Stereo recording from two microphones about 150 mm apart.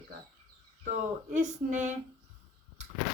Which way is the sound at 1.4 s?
55° right (ahead or behind).